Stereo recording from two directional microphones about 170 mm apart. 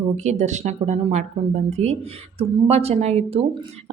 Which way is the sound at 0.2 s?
45° right (ahead or behind).